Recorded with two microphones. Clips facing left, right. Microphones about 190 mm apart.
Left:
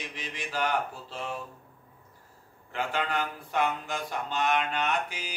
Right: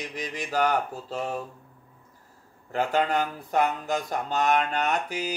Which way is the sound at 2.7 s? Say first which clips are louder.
Right 6 dB; 40° right (ahead or behind).